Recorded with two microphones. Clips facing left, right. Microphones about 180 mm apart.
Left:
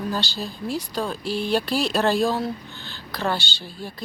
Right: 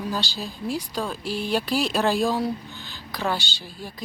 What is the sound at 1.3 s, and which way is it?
Speech, 40° right (ahead or behind).